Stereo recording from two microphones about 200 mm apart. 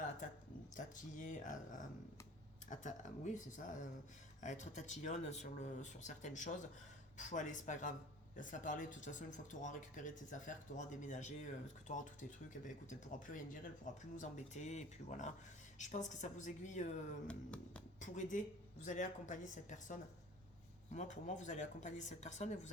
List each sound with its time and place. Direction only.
0.2 s a sound: 40° left (ahead or behind)
0.8 s speech: 40° left (ahead or behind)
17.2 s speech: 5° left (ahead or behind)
18.0 s speech: 40° left (ahead or behind)